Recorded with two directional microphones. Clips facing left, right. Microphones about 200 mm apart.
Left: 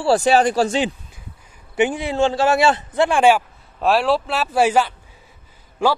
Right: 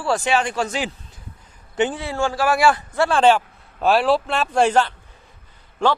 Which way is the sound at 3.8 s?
Centre (ahead or behind).